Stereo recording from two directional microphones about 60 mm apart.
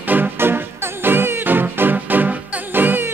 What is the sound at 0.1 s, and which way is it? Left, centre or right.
Music, right.